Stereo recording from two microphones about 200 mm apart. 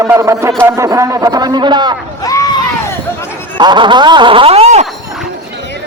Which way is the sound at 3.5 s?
20° right (ahead or behind).